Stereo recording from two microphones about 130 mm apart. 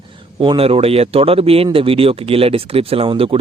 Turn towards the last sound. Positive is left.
turn(degrees=-45)  # may be behind; listen again after turning